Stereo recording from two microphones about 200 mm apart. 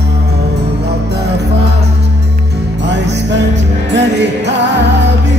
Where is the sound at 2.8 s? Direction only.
60° right (ahead or behind).